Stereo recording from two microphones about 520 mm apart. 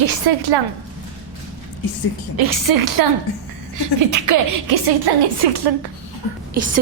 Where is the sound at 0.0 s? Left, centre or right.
Right.